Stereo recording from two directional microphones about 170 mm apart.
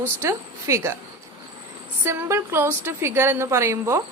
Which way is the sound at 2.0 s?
15° right (ahead or behind).